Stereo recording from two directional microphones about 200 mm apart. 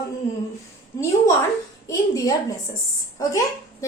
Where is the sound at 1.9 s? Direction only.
15° left (ahead or behind).